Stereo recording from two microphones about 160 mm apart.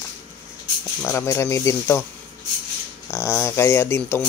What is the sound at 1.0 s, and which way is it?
Speech, 15° left (ahead or behind).